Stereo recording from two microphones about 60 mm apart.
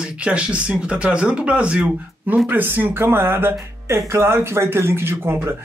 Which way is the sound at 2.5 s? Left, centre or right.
Right.